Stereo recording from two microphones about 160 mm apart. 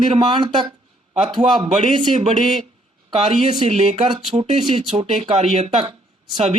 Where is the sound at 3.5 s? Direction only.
40° right (ahead or behind).